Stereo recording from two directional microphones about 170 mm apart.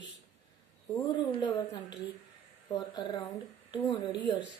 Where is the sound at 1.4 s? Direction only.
25° left (ahead or behind).